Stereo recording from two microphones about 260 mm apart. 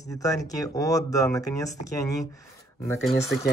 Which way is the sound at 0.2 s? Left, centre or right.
Centre.